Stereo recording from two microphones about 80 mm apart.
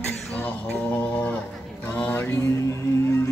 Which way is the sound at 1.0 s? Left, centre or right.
Centre.